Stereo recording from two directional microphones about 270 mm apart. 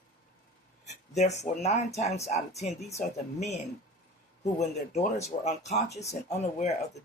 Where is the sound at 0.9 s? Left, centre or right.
Left.